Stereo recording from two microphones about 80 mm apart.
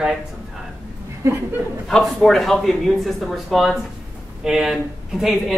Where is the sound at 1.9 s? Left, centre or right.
Centre.